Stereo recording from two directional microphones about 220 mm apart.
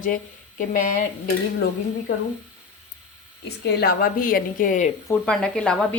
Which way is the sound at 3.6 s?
45° left (ahead or behind).